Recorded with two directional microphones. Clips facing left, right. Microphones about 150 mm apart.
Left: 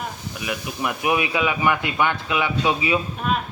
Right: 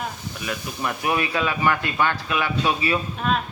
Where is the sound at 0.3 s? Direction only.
15° left (ahead or behind).